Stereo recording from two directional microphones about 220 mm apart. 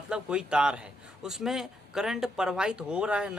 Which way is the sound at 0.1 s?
5° right (ahead or behind).